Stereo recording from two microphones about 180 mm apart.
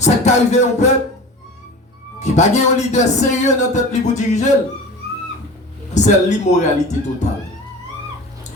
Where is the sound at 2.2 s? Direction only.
40° left (ahead or behind).